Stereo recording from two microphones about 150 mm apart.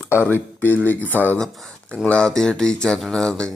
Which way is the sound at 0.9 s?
10° left (ahead or behind).